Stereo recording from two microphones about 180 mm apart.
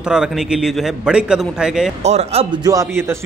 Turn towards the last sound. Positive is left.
turn(degrees=-15)  # may be behind; listen again after turning